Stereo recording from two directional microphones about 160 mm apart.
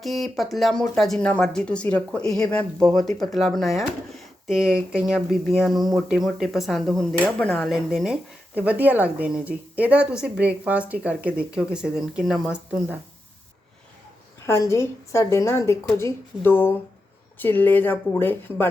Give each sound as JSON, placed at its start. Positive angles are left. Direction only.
{"t": 0.0, "sound": "speech", "side_deg": 0}
{"t": 14.7, "sound": "speech", "side_deg": 15}